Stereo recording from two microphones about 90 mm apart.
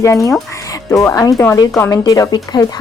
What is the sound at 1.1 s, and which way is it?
Speech, 40° left (ahead or behind).